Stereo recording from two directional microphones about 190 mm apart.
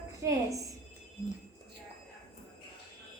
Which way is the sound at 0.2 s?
15° right (ahead or behind).